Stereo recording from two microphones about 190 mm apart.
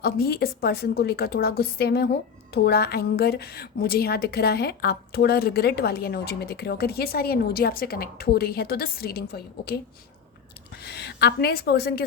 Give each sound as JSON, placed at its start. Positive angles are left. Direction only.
{"t": 0.0, "sound": "a woman's voice", "side_deg": 55}
{"t": 10.8, "sound": "a woman's voice", "side_deg": 60}